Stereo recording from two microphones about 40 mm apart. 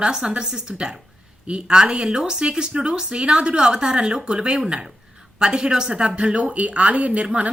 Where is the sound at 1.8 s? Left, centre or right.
Centre.